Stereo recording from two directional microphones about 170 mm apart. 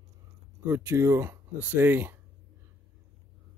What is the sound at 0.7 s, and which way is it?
Speech, 15° right (ahead or behind).